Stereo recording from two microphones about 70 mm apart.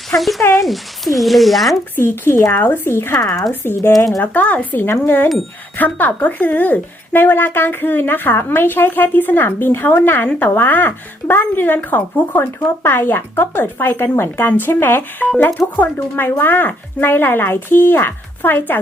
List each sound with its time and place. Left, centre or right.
0.2 s speech: centre
2.0 s speech: left
4.2 s speech: left